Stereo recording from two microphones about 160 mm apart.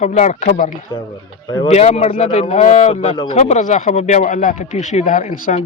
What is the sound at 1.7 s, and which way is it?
Speech, 45° left (ahead or behind).